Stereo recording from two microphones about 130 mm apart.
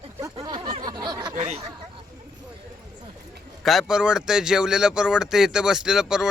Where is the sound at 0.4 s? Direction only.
35° right (ahead or behind).